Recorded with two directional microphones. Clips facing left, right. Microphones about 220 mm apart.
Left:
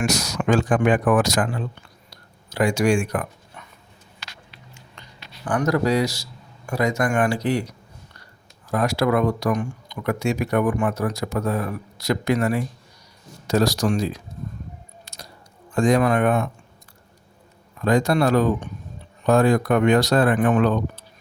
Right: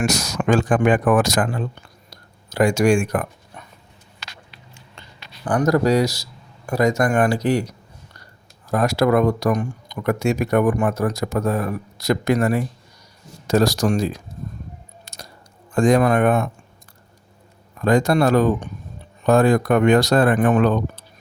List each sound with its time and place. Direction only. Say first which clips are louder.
0.0 s speech: right 2 dB; 50° right (ahead or behind)
2.0 s a sound: right 2 dB; 45° right (ahead or behind)
5.5 s speech: right 3 dB; 40° right (ahead or behind)
8.7 s speech: right 3 dB; 45° right (ahead or behind)
15.0 s music: right 3 dB; 45° right (ahead or behind)
15.7 s speech: right 2 dB; 50° right (ahead or behind)
17.8 s speech: right 2 dB; 50° right (ahead or behind)